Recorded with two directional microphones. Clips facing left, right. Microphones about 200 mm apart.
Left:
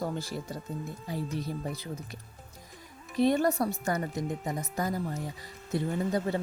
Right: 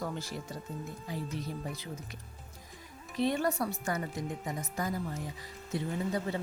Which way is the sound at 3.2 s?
40° left (ahead or behind).